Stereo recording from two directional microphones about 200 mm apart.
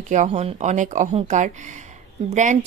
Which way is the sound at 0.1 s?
35° right (ahead or behind).